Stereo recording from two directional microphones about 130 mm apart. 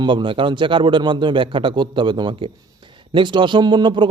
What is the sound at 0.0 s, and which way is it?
Speech, 40° right (ahead or behind).